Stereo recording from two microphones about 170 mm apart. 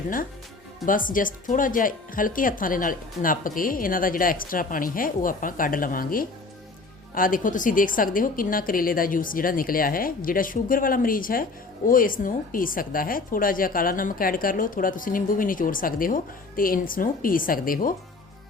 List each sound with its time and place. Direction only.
0.9 s a woman's voice: 55° left (ahead or behind)